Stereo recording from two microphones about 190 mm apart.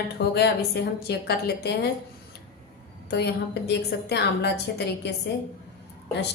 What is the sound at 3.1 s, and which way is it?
A woman's voice, 60° left (ahead or behind).